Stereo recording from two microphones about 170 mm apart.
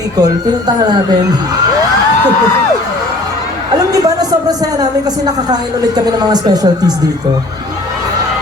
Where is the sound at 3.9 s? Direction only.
20° right (ahead or behind).